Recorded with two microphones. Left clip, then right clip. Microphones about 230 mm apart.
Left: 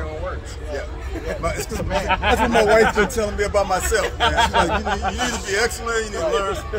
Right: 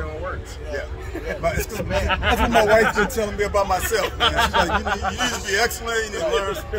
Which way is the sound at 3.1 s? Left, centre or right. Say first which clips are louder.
Left 1 dB; centre.